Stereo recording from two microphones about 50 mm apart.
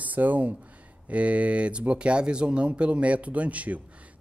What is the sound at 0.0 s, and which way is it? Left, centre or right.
Speech, right.